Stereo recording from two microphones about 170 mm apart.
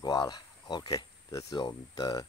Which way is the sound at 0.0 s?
25° left (ahead or behind).